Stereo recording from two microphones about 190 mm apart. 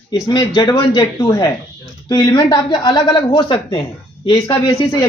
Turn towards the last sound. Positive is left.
turn(degrees=20)  # may be behind; listen again after turning